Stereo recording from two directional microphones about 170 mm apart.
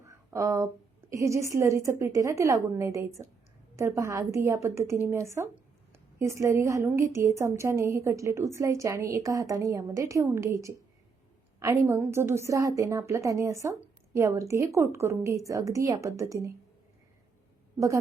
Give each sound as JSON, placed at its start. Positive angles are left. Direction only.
{"t": 0.0, "sound": "a sound", "side_deg": -15}
{"t": 1.1, "sound": "a woman's voice", "side_deg": -15}
{"t": 17.7, "sound": "a woman's voice", "side_deg": -20}